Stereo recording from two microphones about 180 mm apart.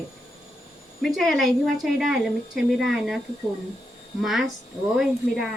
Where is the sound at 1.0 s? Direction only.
Centre (ahead or behind).